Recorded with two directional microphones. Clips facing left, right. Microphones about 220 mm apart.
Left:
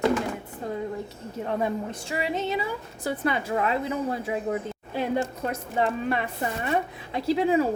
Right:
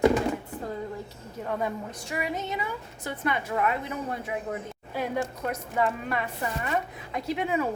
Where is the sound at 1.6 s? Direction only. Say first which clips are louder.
Left 4 dB; 25° left (ahead or behind).